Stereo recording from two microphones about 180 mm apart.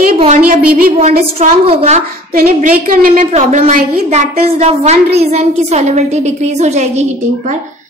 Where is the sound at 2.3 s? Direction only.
50° right (ahead or behind).